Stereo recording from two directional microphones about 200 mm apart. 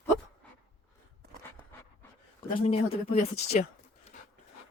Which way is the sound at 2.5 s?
30° left (ahead or behind).